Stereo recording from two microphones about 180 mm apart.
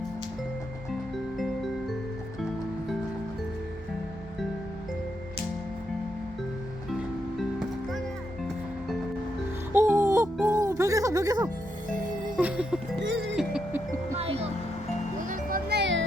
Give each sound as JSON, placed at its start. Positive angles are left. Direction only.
{"t": 1.1, "sound": "music", "side_deg": 0}
{"t": 9.7, "sound": "music", "side_deg": -15}
{"t": 12.4, "sound": "music", "side_deg": -10}
{"t": 13.0, "sound": "music", "side_deg": -90}
{"t": 13.3, "sound": "music", "side_deg": -5}
{"t": 14.2, "sound": "music", "side_deg": -35}
{"t": 15.3, "sound": "music", "side_deg": -55}